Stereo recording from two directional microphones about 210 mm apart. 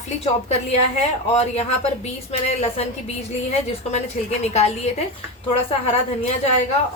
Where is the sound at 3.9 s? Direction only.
30° left (ahead or behind).